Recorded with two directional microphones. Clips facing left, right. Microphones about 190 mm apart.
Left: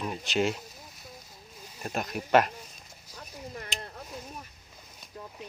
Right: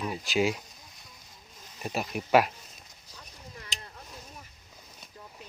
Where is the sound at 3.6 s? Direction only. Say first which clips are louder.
Left 5 dB; 60° left (ahead or behind).